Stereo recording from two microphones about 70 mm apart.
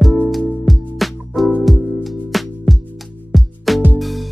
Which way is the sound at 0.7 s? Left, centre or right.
Centre.